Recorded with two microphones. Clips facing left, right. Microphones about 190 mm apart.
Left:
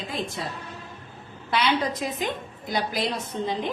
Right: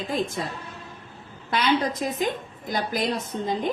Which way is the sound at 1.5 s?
45° right (ahead or behind).